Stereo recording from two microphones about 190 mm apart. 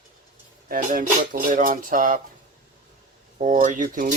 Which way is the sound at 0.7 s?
45° right (ahead or behind).